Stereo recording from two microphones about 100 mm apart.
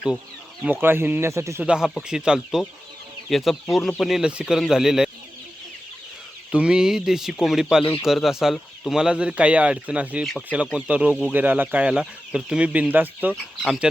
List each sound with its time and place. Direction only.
0.6 s speech: 20° right (ahead or behind)
1.6 s speech: 10° right (ahead or behind)
6.5 s speech: 10° right (ahead or behind)
13.9 s speech: 5° right (ahead or behind)